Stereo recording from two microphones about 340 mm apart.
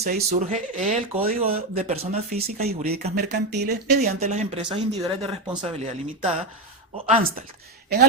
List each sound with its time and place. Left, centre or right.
0.0 s speech: right